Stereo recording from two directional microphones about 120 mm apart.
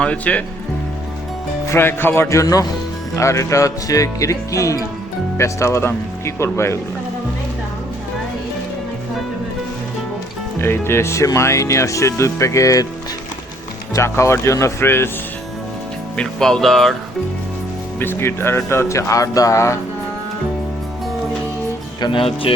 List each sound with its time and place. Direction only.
0.0 s speech: 10° left (ahead or behind)
1.7 s speech: 20° left (ahead or behind)
10.6 s speech: 20° left (ahead or behind)
13.9 s speech: 25° left (ahead or behind)
16.1 s speech: 5° left (ahead or behind)
18.0 s speech: 20° left (ahead or behind)
22.0 s speech: 45° left (ahead or behind)